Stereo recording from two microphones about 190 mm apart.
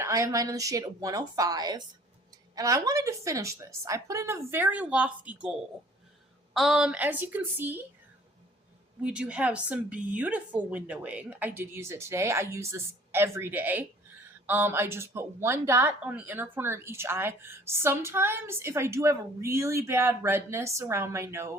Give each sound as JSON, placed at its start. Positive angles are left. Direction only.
{"t": 0.0, "sound": "a woman's voice", "side_deg": -15}
{"t": 6.5, "sound": "a woman's voice", "side_deg": 0}
{"t": 9.0, "sound": "a woman's voice", "side_deg": -5}